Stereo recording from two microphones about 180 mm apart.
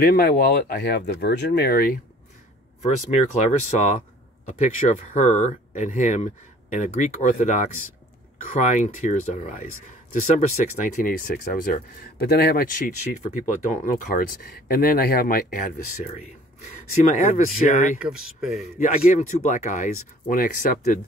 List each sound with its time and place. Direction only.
0.0 s speech: 55° left (ahead or behind)
2.8 s speech: 40° left (ahead or behind)
17.9 s speech: 5° right (ahead or behind)
18.8 s speech: 45° left (ahead or behind)